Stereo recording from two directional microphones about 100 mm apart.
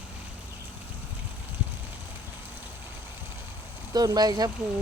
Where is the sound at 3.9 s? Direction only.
40° right (ahead or behind).